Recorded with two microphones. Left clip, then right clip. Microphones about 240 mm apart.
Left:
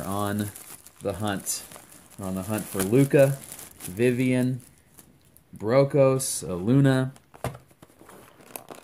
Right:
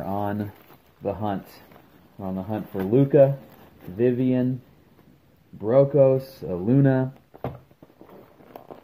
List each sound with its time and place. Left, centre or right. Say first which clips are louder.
0.0 s a sound: right 1 dB; centre
1.0 s speech: right 2 dB; centre
2.1 s speech: right 1 dB; left
2.9 s speech: right 2 dB; left
5.6 s speech: right 3 dB; left